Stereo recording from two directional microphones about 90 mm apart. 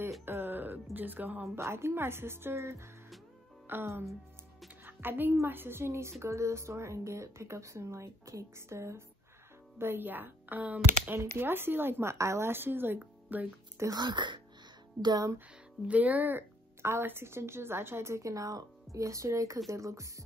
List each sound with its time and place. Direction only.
0.2 s music: 25° right (ahead or behind)
0.9 s speech: 20° right (ahead or behind)
13.9 s speech: 55° right (ahead or behind)
15.9 s speech: 20° right (ahead or behind); by 20.2 s 35° right (ahead or behind)